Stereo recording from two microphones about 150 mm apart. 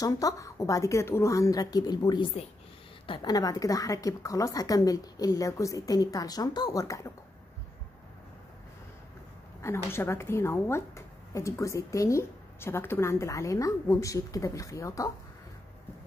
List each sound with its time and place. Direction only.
0.0 s speech: 25° left (ahead or behind)
9.6 s speech: 15° left (ahead or behind)